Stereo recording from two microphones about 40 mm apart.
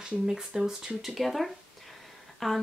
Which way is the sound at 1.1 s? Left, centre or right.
Centre.